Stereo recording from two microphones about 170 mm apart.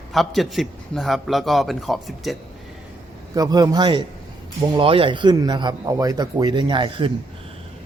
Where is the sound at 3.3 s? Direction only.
20° right (ahead or behind).